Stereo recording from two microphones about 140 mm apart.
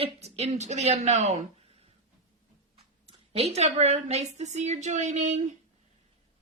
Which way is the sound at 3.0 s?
45° right (ahead or behind).